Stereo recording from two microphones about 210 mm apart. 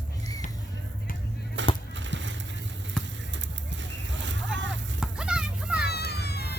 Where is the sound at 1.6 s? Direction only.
60° right (ahead or behind).